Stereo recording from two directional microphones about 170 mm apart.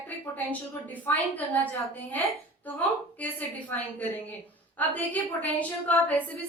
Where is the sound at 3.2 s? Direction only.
10° left (ahead or behind).